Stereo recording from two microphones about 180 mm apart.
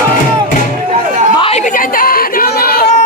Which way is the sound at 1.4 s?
40° left (ahead or behind).